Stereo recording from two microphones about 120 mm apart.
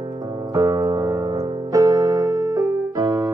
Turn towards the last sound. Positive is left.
turn(degrees=-30)  # may be behind; listen again after turning